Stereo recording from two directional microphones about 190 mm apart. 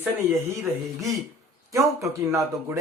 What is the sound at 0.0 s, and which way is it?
Speech, 10° right (ahead or behind).